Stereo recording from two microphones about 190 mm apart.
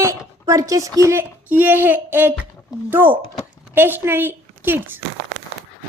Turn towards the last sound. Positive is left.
turn(degrees=-10)  # may be behind; listen again after turning